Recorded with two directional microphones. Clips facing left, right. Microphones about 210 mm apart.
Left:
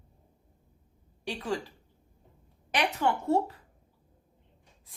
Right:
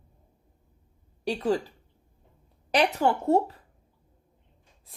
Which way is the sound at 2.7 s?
40° right (ahead or behind).